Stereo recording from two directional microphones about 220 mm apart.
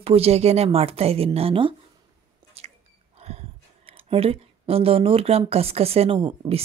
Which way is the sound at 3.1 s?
30° right (ahead or behind).